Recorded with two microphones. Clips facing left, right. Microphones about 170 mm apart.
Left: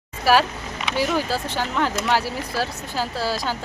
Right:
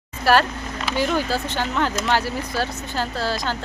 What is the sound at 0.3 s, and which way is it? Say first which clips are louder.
Speech: even; 5° left (ahead or behind).